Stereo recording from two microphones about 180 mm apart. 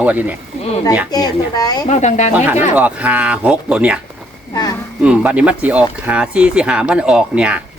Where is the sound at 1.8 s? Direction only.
40° left (ahead or behind).